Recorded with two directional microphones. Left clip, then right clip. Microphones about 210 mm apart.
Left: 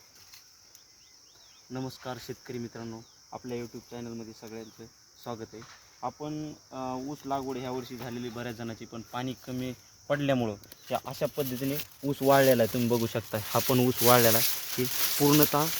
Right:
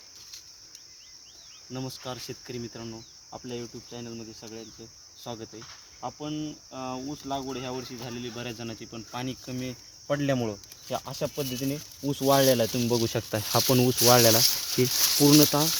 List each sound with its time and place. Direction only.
1.7 s cricket: 5° right (ahead or behind)
13.1 s speech: 25° right (ahead or behind)
13.7 s speech: 15° right (ahead or behind)